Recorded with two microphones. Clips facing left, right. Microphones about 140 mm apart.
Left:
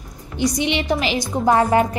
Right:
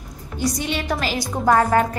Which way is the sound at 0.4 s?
20° left (ahead or behind).